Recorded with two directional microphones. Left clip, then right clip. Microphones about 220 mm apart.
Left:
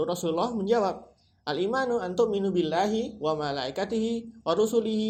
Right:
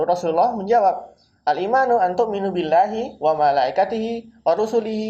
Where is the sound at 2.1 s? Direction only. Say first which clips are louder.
Right 4 dB; 50° left (ahead or behind).